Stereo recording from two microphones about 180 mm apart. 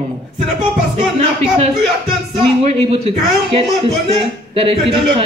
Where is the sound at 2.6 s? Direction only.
35° right (ahead or behind).